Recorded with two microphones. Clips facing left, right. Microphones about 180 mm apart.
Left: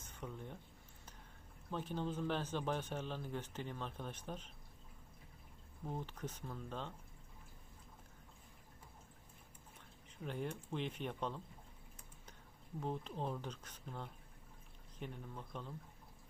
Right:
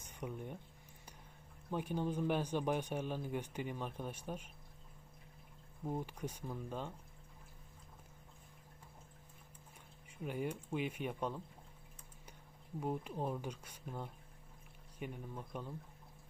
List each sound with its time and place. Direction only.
0.0 s a sound: 15° right (ahead or behind)
1.7 s speech: 10° right (ahead or behind)
5.9 s speech: 10° right (ahead or behind)
10.1 s speech: 10° right (ahead or behind)
12.8 s speech: 10° right (ahead or behind)